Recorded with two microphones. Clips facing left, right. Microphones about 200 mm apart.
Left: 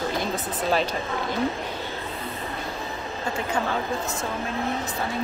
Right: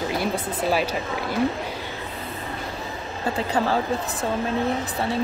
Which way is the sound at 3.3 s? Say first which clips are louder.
Right 4 dB; 35° right (ahead or behind).